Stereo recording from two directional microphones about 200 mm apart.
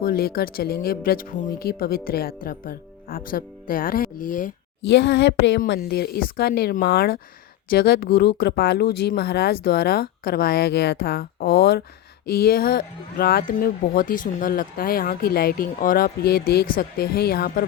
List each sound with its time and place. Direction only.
0.0 s speech: 50° left (ahead or behind)
4.9 s speech: 55° left (ahead or behind)